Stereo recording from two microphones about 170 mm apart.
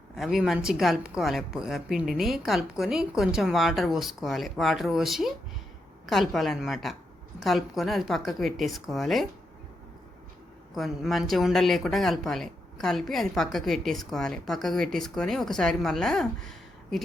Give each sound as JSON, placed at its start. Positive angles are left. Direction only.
{"t": 0.2, "sound": "speech", "side_deg": 0}
{"t": 10.8, "sound": "speech", "side_deg": 0}